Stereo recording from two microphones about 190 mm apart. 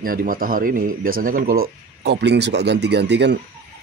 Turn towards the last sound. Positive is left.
turn(degrees=-65)  # may be behind; listen again after turning